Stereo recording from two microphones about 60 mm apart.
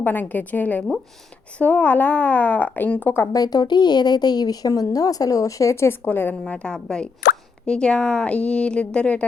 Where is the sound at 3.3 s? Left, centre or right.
Left.